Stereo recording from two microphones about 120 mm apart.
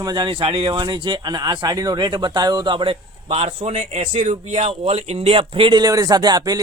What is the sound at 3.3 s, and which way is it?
A man's voice, 60° right (ahead or behind).